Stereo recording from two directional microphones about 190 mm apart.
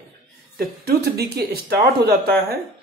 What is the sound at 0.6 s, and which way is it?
Speech, 55° right (ahead or behind).